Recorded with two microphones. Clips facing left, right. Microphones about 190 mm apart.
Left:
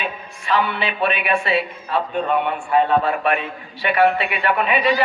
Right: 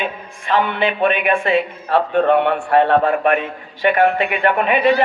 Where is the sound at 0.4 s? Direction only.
50° right (ahead or behind).